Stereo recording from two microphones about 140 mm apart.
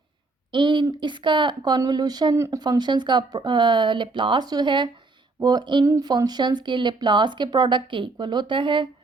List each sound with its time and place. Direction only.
0.5 s speech: 35° right (ahead or behind)